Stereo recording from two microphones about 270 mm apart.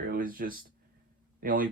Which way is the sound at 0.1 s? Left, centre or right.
Right.